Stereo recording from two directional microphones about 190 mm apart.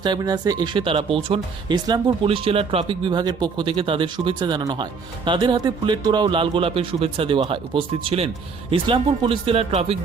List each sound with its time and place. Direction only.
0.0 s speech: 20° right (ahead or behind)